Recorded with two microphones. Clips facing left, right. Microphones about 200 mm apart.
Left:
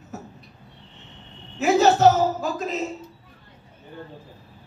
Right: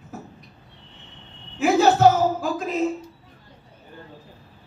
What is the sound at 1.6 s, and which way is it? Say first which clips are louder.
A woman's voice: even; 55° right (ahead or behind).